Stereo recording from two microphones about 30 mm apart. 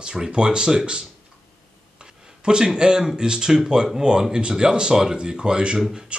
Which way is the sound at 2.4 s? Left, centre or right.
Right.